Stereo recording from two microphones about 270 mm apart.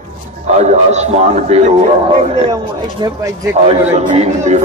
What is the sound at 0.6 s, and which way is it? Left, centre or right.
A man's voice, right.